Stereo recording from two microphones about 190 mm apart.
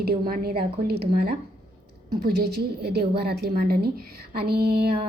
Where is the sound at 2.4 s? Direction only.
60° right (ahead or behind).